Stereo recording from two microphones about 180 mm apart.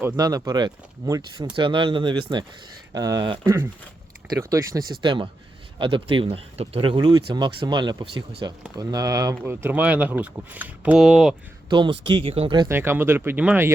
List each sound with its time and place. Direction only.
0.2 s speech: 20° right (ahead or behind); by 11.3 s centre (ahead or behind)
11.7 s speech: 25° right (ahead or behind)
12.6 s speech: 15° right (ahead or behind)